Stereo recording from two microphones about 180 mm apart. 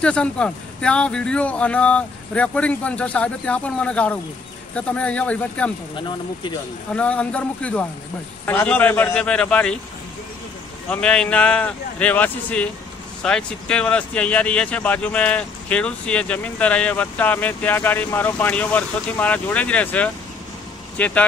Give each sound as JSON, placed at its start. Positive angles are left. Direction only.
{"t": 0.0, "sound": "speech", "side_deg": 5}
{"t": 5.9, "sound": "speech", "side_deg": 25}
{"t": 6.9, "sound": "speech", "side_deg": 5}
{"t": 10.9, "sound": "speech", "side_deg": 5}